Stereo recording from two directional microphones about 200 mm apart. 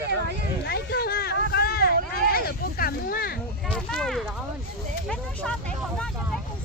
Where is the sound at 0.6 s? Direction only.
55° left (ahead or behind).